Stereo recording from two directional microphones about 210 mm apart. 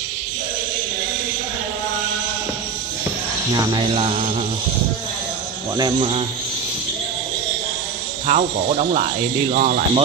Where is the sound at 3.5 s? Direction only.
20° right (ahead or behind).